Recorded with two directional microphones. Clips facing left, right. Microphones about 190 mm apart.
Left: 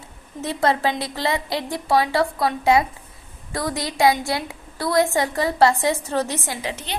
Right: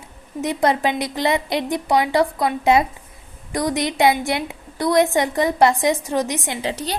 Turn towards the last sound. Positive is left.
turn(degrees=-35)  # may be behind; listen again after turning